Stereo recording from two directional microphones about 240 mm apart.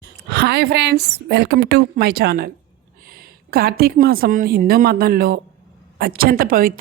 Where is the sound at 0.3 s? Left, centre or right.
Right.